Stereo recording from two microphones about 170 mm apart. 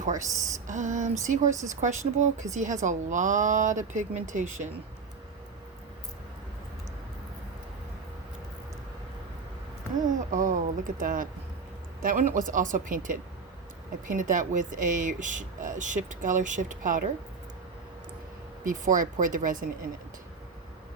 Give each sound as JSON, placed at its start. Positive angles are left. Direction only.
{"t": 0.3, "sound": "speech", "side_deg": -20}
{"t": 0.7, "sound": "speech", "side_deg": -45}
{"t": 1.5, "sound": "speech", "side_deg": -20}
{"t": 1.7, "sound": "speech", "side_deg": -45}
{"t": 10.2, "sound": "speech", "side_deg": -50}
{"t": 18.6, "sound": "speech", "side_deg": -50}